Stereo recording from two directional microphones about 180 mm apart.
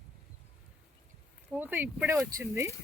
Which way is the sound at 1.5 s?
10° right (ahead or behind).